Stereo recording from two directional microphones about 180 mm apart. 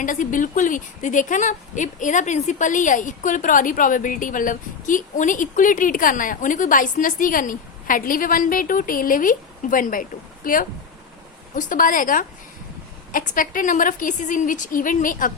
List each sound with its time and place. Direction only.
0.0 s a woman's voice: 45° left (ahead or behind)